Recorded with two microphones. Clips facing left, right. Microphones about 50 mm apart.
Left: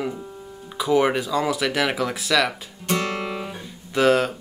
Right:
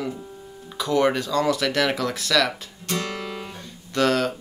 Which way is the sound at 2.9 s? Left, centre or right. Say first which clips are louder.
Left 4 dB; left.